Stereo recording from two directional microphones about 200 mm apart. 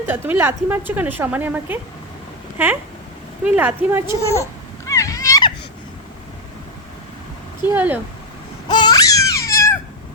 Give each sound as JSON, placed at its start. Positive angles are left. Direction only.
{"t": 0.0, "sound": "a woman's voice", "side_deg": -10}
{"t": 3.4, "sound": "a woman's voice", "side_deg": -5}
{"t": 4.2, "sound": "speech", "side_deg": 15}
{"t": 4.9, "sound": "a sound", "side_deg": 15}
{"t": 7.7, "sound": "a woman's voice", "side_deg": -10}
{"t": 8.6, "sound": "baby cry", "side_deg": 20}